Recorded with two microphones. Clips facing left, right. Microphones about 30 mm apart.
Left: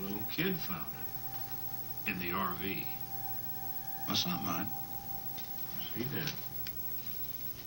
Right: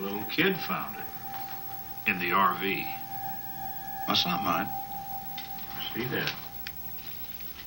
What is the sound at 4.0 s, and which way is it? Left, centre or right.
Speech, right.